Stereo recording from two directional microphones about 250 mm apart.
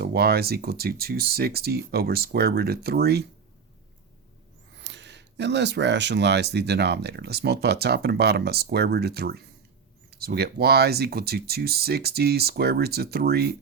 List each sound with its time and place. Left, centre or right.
0.0 s speech: right
4.8 s speech: right